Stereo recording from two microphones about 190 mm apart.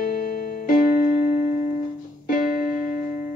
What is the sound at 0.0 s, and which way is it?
Keyboard, 50° left (ahead or behind).